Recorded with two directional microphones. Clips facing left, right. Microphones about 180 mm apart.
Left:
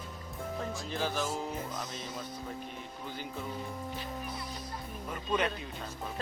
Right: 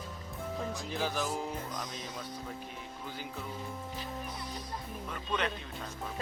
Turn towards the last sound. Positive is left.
turn(degrees=10)  # may be behind; listen again after turning